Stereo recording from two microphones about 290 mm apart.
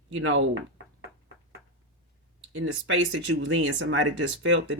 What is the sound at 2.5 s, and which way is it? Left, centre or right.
Speech, right.